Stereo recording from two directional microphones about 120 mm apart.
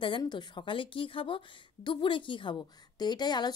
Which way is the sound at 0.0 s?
40° left (ahead or behind).